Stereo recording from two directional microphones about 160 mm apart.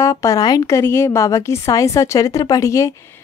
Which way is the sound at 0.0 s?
20° left (ahead or behind).